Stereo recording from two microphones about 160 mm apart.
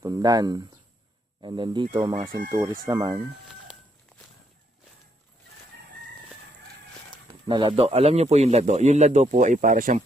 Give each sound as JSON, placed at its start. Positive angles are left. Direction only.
{"t": 0.0, "sound": "speech", "side_deg": -25}
{"t": 7.4, "sound": "a man's voice", "side_deg": -30}